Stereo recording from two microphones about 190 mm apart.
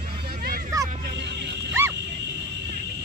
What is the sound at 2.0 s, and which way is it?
Dog, 65° right (ahead or behind).